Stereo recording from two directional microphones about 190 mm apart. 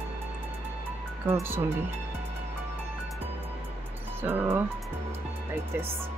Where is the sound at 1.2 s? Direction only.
10° right (ahead or behind).